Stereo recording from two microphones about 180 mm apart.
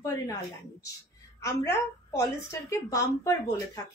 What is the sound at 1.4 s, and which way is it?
Speech, 15° left (ahead or behind).